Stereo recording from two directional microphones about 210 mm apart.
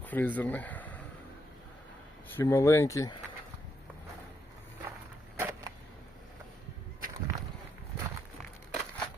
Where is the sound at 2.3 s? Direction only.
15° left (ahead or behind).